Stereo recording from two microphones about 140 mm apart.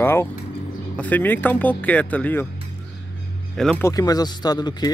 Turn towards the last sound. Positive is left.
turn(degrees=30)  # may be behind; listen again after turning